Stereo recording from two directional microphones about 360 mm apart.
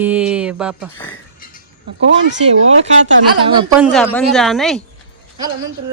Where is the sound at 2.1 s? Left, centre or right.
Right.